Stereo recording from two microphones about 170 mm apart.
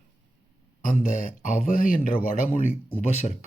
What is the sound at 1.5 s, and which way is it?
Speech, 50° left (ahead or behind).